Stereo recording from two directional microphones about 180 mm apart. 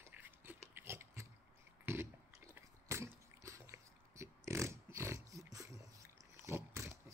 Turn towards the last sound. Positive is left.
turn(degrees=-15)  # may be behind; listen again after turning